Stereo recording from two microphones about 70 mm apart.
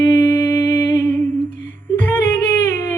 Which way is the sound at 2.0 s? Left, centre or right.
Left.